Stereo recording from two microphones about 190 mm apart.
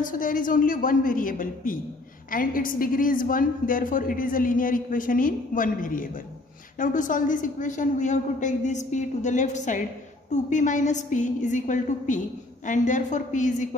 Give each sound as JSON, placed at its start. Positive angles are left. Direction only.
{"t": 0.0, "sound": "a woman's voice", "side_deg": 45}